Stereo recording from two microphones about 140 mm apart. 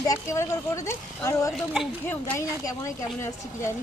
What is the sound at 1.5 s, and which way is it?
Speech, 5° right (ahead or behind).